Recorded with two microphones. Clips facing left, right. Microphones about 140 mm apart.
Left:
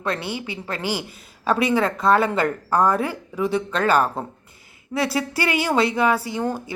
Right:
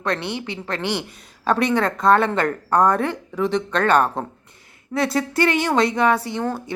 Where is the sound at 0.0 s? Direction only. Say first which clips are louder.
Right 2 dB; 5° left (ahead or behind).